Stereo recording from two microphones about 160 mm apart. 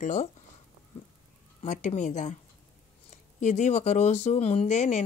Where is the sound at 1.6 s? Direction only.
50° left (ahead or behind).